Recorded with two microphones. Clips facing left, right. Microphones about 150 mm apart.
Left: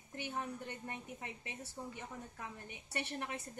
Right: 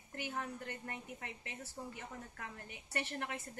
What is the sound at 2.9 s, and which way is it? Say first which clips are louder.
Speech: even; 20° left (ahead or behind).